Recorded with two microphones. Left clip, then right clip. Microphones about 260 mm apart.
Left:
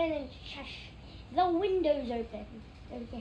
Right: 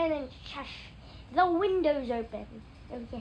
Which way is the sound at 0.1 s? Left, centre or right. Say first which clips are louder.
Right 3 dB; centre.